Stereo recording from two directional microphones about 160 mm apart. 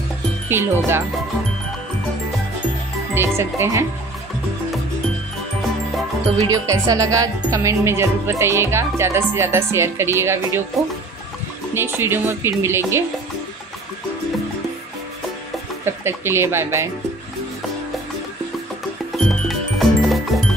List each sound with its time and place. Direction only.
0.5 s music: 15° right (ahead or behind)
3.2 s music: 15° right (ahead or behind)
6.4 s music: 20° right (ahead or behind)
11.7 s music: 15° right (ahead or behind)
15.8 s music: 15° right (ahead or behind)
19.4 s music: centre (ahead or behind)